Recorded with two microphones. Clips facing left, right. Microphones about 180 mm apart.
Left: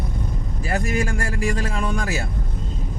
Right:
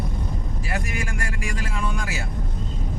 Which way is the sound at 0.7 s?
45° left (ahead or behind).